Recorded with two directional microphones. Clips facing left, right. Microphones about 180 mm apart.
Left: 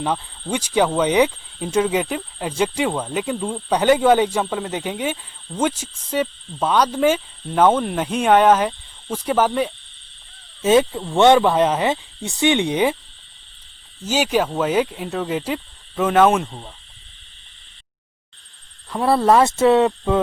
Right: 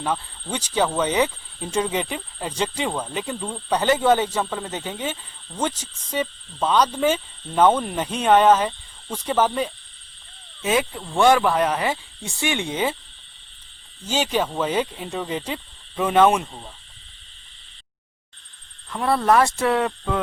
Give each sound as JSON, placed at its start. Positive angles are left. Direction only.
{"t": 0.0, "sound": "speech", "side_deg": 15}
{"t": 10.6, "sound": "speech", "side_deg": 25}
{"t": 14.1, "sound": "speech", "side_deg": 10}
{"t": 18.9, "sound": "speech", "side_deg": 30}